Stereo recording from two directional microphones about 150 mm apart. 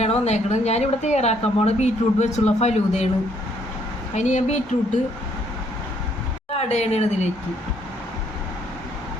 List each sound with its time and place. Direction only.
0.0 s speech: 45° left (ahead or behind)
4.1 s speech: 50° left (ahead or behind)
6.5 s a woman's voice: 45° left (ahead or behind)